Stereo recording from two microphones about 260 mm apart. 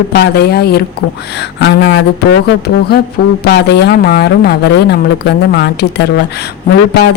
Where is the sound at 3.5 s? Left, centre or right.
Left.